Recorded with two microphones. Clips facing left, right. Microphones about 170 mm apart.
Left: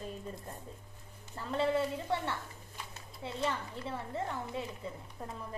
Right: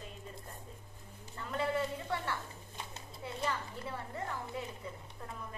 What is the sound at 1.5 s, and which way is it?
A child's voice, 25° left (ahead or behind).